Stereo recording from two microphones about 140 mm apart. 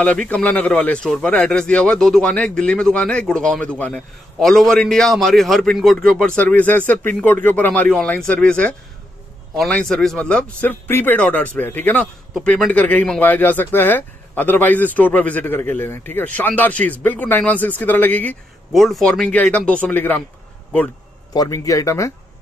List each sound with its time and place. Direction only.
0.0 s speech: 10° left (ahead or behind)
18.7 s speech: centre (ahead or behind)
21.3 s speech: 25° left (ahead or behind)